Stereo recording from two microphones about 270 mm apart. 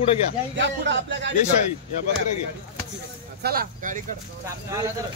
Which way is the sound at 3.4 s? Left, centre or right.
Right.